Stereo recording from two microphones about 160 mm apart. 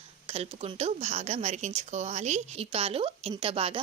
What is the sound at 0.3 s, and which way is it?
A woman's voice, 40° right (ahead or behind).